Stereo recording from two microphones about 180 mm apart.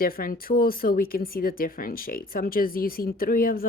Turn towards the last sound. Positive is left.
turn(degrees=55)  # may be behind; listen again after turning